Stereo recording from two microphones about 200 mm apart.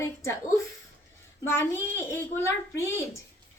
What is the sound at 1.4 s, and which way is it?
A woman's voice, 10° left (ahead or behind).